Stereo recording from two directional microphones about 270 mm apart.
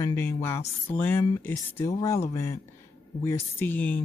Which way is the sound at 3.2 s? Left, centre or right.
Centre.